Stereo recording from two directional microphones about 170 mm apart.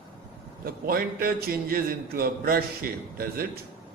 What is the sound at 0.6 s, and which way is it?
A man's voice, 60° right (ahead or behind).